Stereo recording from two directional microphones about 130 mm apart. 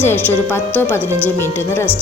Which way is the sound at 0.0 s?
15° left (ahead or behind).